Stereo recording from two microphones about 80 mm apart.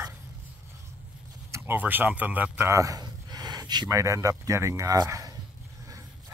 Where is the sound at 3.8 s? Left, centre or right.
Right.